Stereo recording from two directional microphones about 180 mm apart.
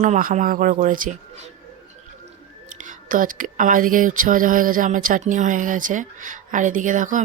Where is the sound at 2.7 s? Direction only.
45° right (ahead or behind).